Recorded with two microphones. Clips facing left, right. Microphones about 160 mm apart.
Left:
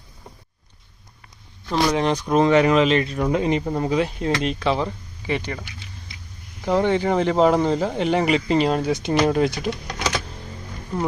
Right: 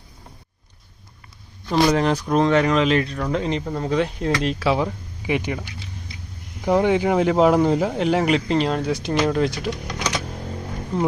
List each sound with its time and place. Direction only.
1.7 s speech: centre (ahead or behind)
3.2 s speech: 15° left (ahead or behind)
4.4 s speech: 5° right (ahead or behind)
6.7 s speech: 10° right (ahead or behind)